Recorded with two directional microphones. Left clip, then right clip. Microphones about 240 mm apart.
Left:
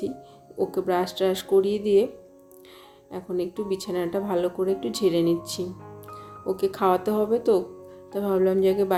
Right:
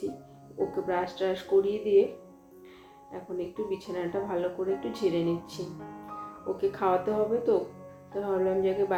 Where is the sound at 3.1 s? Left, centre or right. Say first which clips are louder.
Left 6 dB; left.